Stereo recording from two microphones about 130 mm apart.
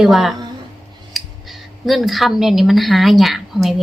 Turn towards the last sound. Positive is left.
turn(degrees=0)  # may be behind; listen again after turning